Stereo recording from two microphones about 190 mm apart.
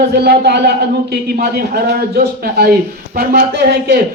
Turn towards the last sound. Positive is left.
turn(degrees=-60)  # may be behind; listen again after turning